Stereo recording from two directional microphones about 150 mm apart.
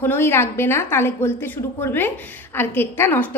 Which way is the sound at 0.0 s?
15° left (ahead or behind).